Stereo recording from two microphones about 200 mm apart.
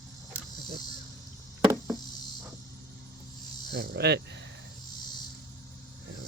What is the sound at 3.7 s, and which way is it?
Speech, 55° right (ahead or behind).